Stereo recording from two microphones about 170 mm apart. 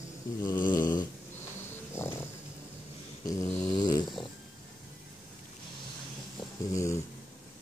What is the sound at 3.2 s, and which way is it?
Dog, 20° left (ahead or behind).